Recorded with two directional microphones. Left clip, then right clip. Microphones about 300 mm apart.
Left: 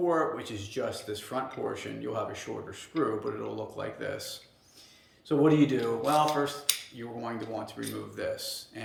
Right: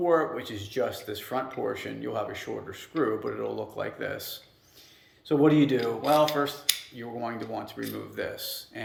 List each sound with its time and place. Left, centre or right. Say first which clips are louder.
0.0 s speech: right 3 dB; centre
5.3 s speech: right 2 dB; centre